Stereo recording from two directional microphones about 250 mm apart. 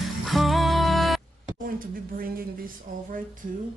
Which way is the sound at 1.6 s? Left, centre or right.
Right.